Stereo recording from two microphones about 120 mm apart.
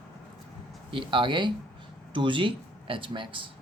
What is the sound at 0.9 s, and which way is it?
Speech, 45° right (ahead or behind).